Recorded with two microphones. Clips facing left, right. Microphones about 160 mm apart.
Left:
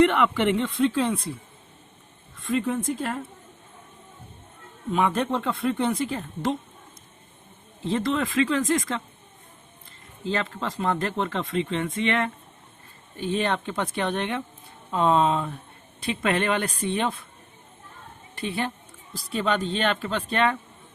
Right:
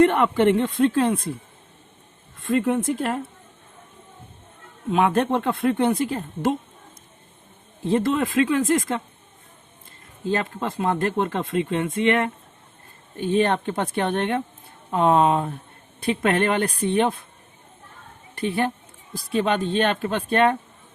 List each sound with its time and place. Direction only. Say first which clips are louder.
0.0 s speech: right 3 dB; 50° right (ahead or behind)
2.4 s speech: right 4 dB; 55° right (ahead or behind)
4.9 s speech: right 4 dB; 60° right (ahead or behind)
7.9 s speech: right 4 dB; 50° right (ahead or behind)
10.2 s speech: right 3 dB; 50° right (ahead or behind)
13.1 s speech: right 5 dB; 50° right (ahead or behind)
18.3 s speech: right 5 dB; 55° right (ahead or behind)